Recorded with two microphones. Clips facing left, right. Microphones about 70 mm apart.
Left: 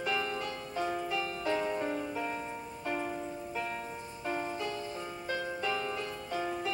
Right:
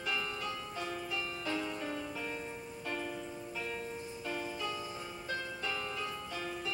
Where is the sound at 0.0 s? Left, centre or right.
Left.